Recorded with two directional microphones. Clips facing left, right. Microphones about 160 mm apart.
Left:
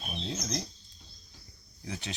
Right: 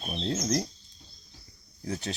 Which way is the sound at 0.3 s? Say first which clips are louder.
Right 8 dB; 50° right (ahead or behind).